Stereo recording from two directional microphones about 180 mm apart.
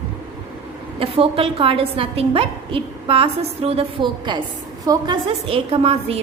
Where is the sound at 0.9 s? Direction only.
30° right (ahead or behind).